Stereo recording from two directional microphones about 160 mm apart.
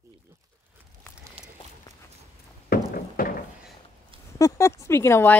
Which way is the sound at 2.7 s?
70° left (ahead or behind).